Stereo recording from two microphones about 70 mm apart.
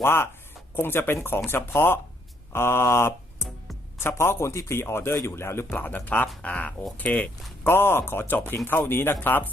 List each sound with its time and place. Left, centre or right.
0.0 s a man's voice: left
2.5 s a sound: left
4.0 s a man's voice: left
7.6 s a man's voice: left